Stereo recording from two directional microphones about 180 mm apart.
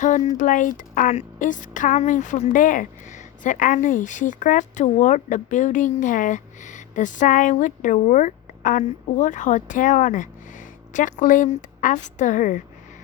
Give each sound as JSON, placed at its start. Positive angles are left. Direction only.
{"t": 0.3, "sound": "a woman's voice", "side_deg": 45}